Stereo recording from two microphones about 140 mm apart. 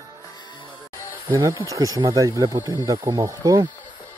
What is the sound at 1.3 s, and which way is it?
Speech, 20° right (ahead or behind).